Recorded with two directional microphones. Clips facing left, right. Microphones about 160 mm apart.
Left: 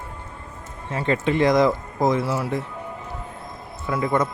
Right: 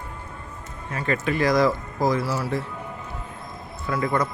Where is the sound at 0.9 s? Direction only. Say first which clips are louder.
Left 3 dB; 25° left (ahead or behind).